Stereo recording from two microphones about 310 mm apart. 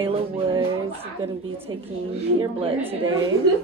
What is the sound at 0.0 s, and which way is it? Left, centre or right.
Speech, centre.